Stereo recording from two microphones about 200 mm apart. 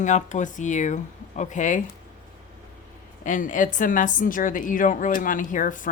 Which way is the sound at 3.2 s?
40° left (ahead or behind).